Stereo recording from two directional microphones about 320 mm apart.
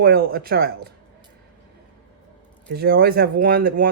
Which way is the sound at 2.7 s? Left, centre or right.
Right.